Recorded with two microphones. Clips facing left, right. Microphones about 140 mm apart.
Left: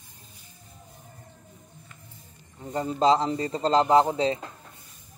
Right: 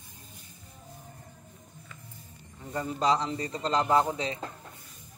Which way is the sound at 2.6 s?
25° left (ahead or behind).